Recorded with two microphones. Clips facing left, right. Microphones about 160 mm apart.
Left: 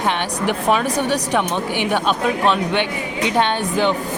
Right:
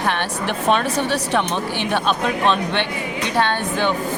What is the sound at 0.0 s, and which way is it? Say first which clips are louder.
A woman's voice: left 2 dB; 20° left (ahead or behind).